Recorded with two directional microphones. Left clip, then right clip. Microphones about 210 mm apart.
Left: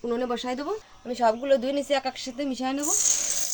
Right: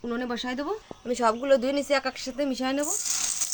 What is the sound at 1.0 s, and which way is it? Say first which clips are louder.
Speech: left 1 dB; 25° right (ahead or behind).